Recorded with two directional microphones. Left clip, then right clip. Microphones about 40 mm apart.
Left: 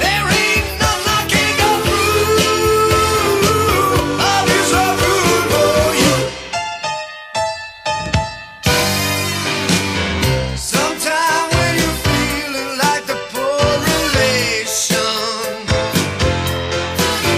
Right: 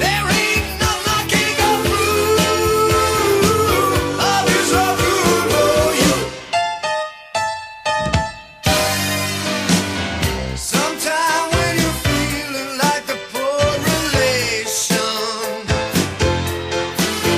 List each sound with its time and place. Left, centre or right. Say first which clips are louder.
0.0 s music: left 2 dB; left
10.7 s music: left 2 dB; left
11.1 s music: left 2 dB; left
13.5 s music: left 2 dB; left
14.0 s music: left 2 dB; left
14.8 s music: left 2 dB; left